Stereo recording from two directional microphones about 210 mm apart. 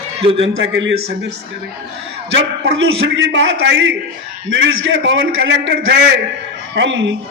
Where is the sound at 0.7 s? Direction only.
60° right (ahead or behind).